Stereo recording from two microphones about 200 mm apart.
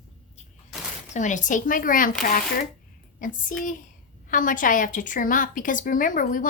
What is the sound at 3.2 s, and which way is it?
A woman's voice, 40° left (ahead or behind).